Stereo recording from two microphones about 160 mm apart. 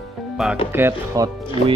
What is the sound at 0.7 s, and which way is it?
Music, 15° right (ahead or behind).